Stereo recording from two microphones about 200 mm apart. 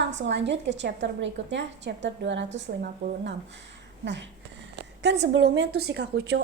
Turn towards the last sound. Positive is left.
turn(degrees=-60)  # may be behind; listen again after turning